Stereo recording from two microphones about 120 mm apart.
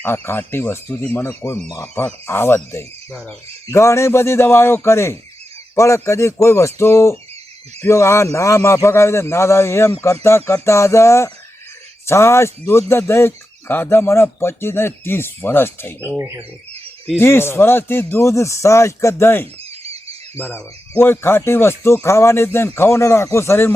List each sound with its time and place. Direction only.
0.0 s speech: 20° left (ahead or behind)
3.1 s speech: 5° left (ahead or behind)
3.7 s speech: 25° left (ahead or behind)
16.1 s speech: 20° right (ahead or behind)
17.2 s speech: 20° left (ahead or behind)
20.6 s speech: 15° left (ahead or behind)